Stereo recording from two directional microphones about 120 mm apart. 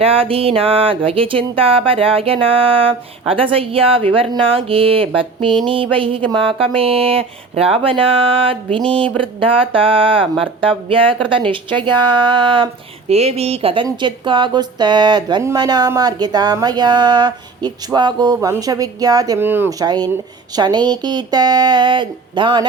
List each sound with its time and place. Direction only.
0.0 s a sound: 50° right (ahead or behind)
13.1 s speech: 60° right (ahead or behind); by 18.3 s 35° right (ahead or behind)
18.3 s speech: 25° right (ahead or behind)
19.4 s speech: 20° right (ahead or behind)
19.8 s speech: 35° right (ahead or behind)